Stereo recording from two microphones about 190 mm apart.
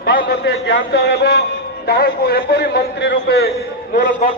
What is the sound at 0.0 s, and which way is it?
A man's voice, 60° left (ahead or behind).